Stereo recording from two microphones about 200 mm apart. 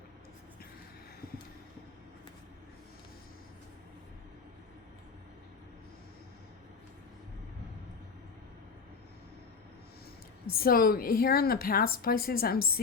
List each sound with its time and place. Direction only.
10.4 s a woman's voice: 50° left (ahead or behind)